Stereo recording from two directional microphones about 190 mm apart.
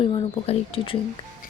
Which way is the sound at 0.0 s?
30° left (ahead or behind).